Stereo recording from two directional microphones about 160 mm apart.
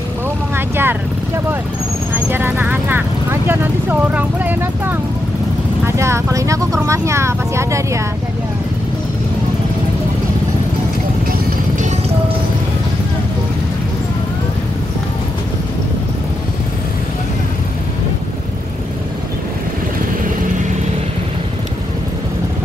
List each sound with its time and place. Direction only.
0.6 s vehicle: 15° right (ahead or behind)
5.9 s speech: 15° right (ahead or behind)